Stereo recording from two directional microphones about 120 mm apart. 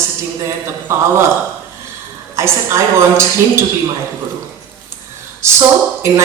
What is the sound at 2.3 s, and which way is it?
Speech, 20° right (ahead or behind).